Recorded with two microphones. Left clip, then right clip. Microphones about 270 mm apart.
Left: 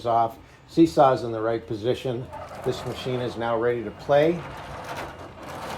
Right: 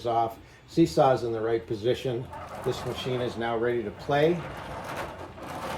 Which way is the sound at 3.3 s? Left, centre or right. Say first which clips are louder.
Left 6 dB; centre.